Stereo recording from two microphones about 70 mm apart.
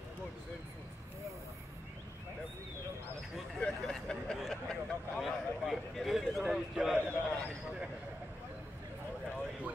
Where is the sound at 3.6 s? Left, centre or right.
Centre.